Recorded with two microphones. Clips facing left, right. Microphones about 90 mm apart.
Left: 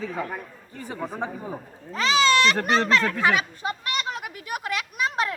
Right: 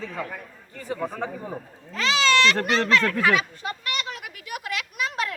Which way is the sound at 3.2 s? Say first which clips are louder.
Even; 30° left (ahead or behind).